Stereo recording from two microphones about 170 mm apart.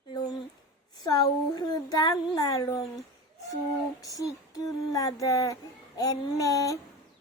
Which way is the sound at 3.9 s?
20° left (ahead or behind).